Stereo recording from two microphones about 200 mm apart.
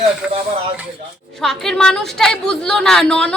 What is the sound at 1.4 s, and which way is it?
Speech, centre (ahead or behind).